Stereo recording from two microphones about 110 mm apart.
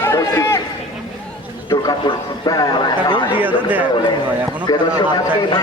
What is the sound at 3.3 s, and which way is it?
Speech, 15° right (ahead or behind).